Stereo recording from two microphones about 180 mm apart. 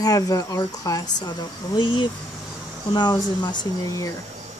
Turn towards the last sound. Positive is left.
turn(degrees=20)  # may be behind; listen again after turning